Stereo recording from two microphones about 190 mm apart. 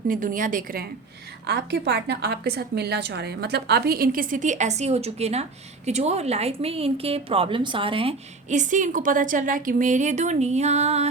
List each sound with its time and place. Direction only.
0.1 s a woman's voice: 45° right (ahead or behind)
1.5 s a woman's voice: 60° right (ahead or behind); by 11.1 s 35° right (ahead or behind)